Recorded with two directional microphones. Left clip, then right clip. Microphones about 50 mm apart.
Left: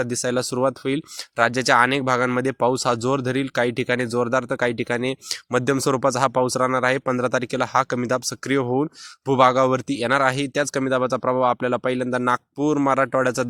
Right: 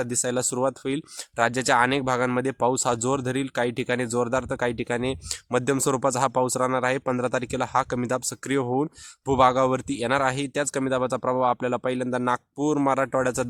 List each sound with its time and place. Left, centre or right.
0.0 s speech: left
2.0 s speech: left
3.3 s speech: left
4.1 s speech: left
5.7 s speech: left
6.0 s speech: left
10.0 s speech: left
12.5 s speech: left
12.9 s speech: left